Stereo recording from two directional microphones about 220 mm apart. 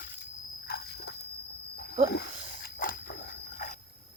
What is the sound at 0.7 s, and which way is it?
Dog, 45° left (ahead or behind).